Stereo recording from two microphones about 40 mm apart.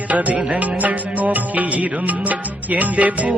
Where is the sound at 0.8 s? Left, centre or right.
Right.